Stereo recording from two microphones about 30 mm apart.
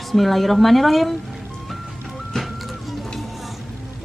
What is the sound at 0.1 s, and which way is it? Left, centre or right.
Speech, centre.